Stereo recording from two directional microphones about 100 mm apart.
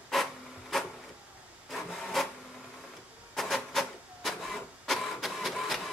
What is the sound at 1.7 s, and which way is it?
Rub, centre (ahead or behind).